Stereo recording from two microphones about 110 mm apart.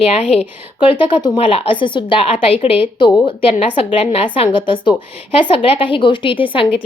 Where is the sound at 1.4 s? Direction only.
55° left (ahead or behind).